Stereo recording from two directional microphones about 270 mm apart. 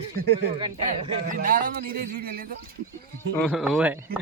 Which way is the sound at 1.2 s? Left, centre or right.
Right.